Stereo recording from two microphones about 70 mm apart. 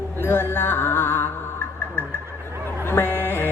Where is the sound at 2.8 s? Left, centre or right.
Left.